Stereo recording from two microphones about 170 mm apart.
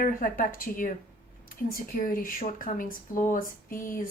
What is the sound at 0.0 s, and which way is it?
Speech, 55° left (ahead or behind).